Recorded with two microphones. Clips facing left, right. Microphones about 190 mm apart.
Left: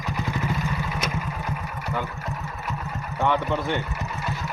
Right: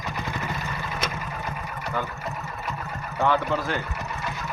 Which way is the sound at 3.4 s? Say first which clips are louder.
Even; centre (ahead or behind).